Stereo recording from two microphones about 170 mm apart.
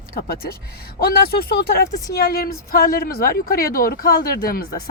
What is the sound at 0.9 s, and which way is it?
Speech, 60° left (ahead or behind).